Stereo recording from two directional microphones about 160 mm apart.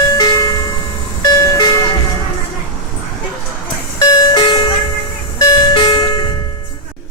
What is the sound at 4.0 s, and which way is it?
Music, 30° left (ahead or behind).